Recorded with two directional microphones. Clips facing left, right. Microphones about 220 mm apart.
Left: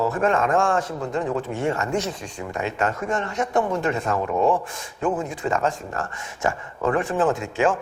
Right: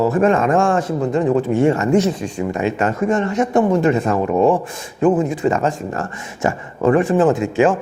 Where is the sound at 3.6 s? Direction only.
20° right (ahead or behind).